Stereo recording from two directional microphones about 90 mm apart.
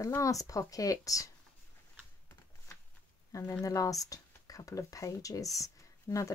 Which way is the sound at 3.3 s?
35° left (ahead or behind).